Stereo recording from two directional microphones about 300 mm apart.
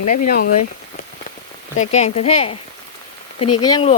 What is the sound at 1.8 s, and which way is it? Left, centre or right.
Speech, left.